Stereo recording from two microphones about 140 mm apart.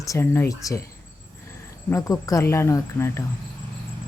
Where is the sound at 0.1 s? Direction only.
20° left (ahead or behind).